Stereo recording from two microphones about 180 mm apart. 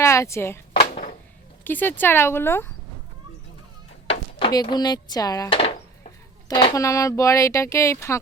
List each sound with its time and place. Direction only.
0.0 s speech: 15° left (ahead or behind)
1.6 s speech: 10° left (ahead or behind)
4.0 s speech: 30° left (ahead or behind)
5.5 s speech: 30° left (ahead or behind); by 8.2 s 15° left (ahead or behind)